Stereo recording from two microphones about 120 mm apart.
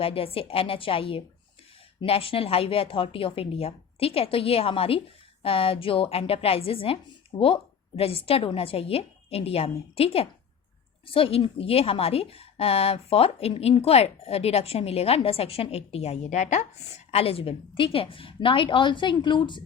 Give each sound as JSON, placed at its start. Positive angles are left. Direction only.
{"t": 0.0, "sound": "a woman's voice", "side_deg": 50}
{"t": 17.1, "sound": "a woman's voice", "side_deg": 55}